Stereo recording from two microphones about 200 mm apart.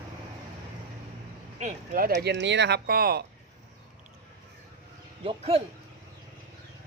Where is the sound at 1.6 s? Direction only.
40° right (ahead or behind).